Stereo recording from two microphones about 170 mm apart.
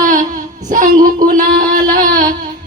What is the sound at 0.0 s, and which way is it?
Child singing, 50° right (ahead or behind).